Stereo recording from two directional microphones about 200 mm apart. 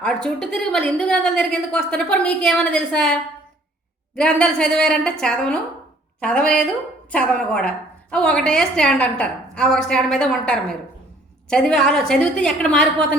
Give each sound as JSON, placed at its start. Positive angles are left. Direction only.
{"t": 0.0, "sound": "a woman's voice", "side_deg": 5}